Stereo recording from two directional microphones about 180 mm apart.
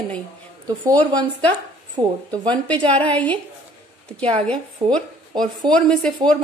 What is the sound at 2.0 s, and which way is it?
Speech, 25° right (ahead or behind).